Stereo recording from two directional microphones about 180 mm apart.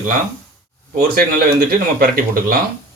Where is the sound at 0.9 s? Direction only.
60° right (ahead or behind).